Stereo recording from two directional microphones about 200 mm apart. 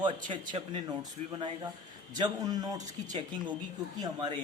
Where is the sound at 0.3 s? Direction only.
25° right (ahead or behind).